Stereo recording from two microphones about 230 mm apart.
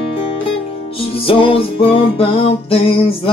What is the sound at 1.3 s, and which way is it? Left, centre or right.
Music, left.